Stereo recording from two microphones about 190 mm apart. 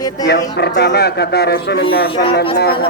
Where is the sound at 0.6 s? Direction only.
60° left (ahead or behind).